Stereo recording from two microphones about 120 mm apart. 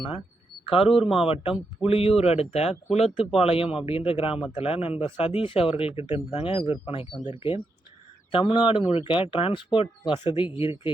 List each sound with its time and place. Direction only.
0.6 s a man's voice: 50° left (ahead or behind)
0.9 s speech: centre (ahead or behind)
1.3 s speech: 50° left (ahead or behind)